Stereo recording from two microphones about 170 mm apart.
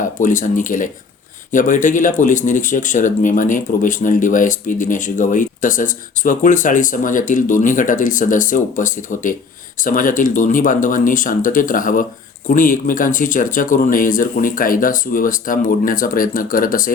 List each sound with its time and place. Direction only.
0.0 s speech: 50° left (ahead or behind)